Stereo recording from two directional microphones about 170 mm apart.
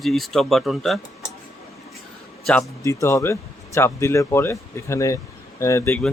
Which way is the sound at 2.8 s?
20° left (ahead or behind).